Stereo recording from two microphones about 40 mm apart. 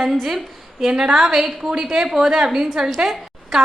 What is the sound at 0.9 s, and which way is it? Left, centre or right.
Speech, centre.